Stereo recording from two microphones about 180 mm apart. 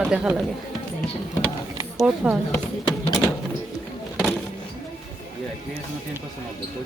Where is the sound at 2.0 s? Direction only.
Centre (ahead or behind).